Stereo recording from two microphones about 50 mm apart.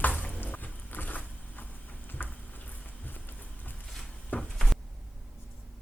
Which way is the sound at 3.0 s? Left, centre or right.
Left.